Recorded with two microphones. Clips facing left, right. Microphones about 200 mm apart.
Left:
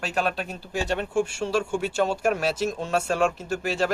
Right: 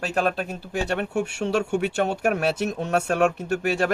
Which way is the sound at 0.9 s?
65° right (ahead or behind).